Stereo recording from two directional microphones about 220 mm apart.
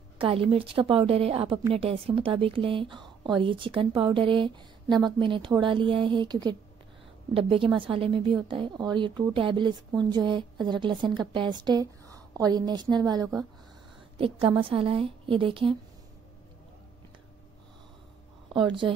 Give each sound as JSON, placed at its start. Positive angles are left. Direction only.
{"t": 0.2, "sound": "a woman's voice", "side_deg": -25}
{"t": 18.5, "sound": "a woman's voice", "side_deg": -20}